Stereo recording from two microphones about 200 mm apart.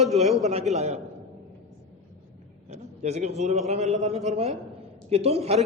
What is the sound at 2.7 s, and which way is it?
A man's voice, 35° right (ahead or behind).